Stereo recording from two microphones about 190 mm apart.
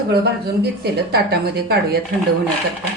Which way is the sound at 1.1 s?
60° right (ahead or behind).